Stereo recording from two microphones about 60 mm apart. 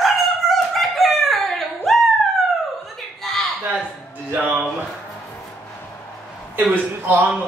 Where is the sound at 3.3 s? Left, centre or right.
Centre.